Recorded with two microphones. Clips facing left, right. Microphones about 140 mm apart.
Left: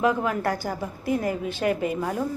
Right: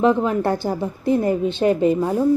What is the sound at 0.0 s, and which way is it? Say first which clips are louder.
A woman's voice: right 6 dB; 25° right (ahead or behind).